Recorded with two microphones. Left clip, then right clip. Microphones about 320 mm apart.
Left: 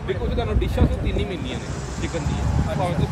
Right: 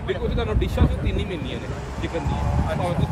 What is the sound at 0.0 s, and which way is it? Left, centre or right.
Speech, centre.